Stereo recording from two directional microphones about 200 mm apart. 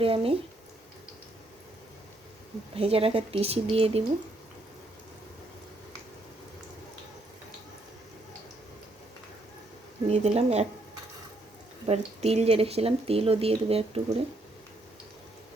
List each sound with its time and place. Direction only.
0.0 s speech: 30° right (ahead or behind)
2.7 s speech: 30° right (ahead or behind)
10.1 s speech: 30° right (ahead or behind)
11.9 s speech: 30° right (ahead or behind)